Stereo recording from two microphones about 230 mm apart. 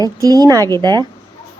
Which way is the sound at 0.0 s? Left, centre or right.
Centre.